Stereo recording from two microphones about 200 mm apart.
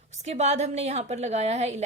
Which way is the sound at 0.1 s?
35° right (ahead or behind).